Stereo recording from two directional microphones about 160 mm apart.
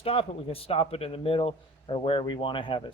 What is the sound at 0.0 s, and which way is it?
Speech, 35° left (ahead or behind).